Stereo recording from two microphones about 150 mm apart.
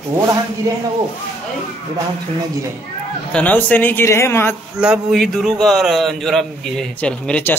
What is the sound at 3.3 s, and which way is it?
A man's voice, 10° left (ahead or behind).